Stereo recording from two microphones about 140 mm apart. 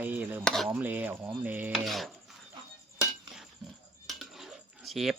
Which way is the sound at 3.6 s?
Centre (ahead or behind).